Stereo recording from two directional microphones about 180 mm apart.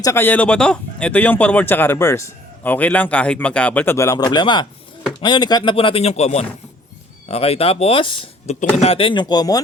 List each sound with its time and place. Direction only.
0.0 s speech: 15° left (ahead or behind)